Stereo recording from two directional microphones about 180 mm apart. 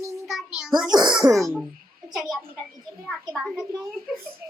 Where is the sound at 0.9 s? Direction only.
20° right (ahead or behind).